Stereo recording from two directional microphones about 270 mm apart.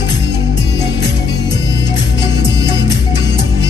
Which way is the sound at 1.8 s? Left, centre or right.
Left.